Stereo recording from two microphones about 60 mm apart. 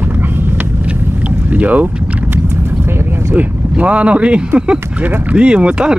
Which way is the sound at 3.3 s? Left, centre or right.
Right.